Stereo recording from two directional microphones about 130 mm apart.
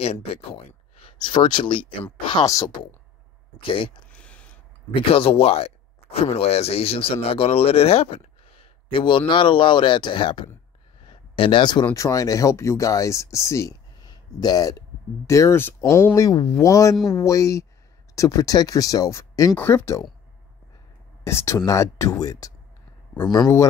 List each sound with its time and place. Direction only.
0.0 s speech: 50° left (ahead or behind); by 2.7 s 25° left (ahead or behind)
3.6 s speech: 40° left (ahead or behind)
4.1 s a sound: 10° left (ahead or behind)
5.0 s speech: 45° left (ahead or behind); by 20.1 s 20° left (ahead or behind)
21.3 s speech: 20° left (ahead or behind)